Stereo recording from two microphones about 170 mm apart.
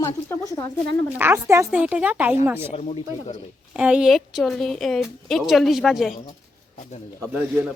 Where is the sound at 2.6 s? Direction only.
35° left (ahead or behind).